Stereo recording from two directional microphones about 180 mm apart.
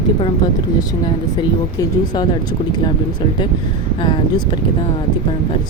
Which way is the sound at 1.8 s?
25° left (ahead or behind).